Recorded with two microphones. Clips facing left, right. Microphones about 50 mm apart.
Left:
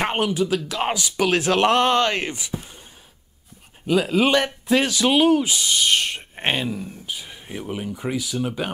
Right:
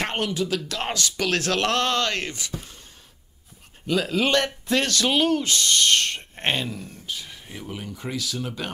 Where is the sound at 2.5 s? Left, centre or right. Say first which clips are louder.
Even; centre.